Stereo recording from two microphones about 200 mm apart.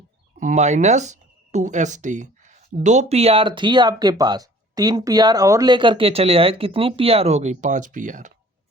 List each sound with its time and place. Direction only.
0.3 s speech: 40° right (ahead or behind)